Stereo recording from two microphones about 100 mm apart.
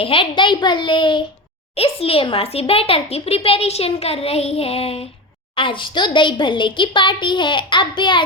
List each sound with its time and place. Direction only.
0.0 s a child's voice: 60° left (ahead or behind)
1.7 s a child's voice: 75° left (ahead or behind)
5.5 s a woman's voice: 55° left (ahead or behind)